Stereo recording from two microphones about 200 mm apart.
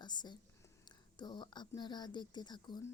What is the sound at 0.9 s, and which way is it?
Speech, 20° left (ahead or behind).